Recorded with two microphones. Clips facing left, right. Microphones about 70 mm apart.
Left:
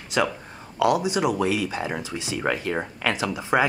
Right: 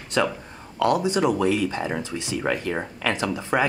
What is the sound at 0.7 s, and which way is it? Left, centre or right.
Speech, centre.